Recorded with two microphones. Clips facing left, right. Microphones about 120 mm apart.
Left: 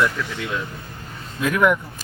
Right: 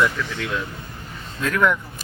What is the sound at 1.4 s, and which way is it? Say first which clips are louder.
Speech: left 2 dB; 15° left (ahead or behind).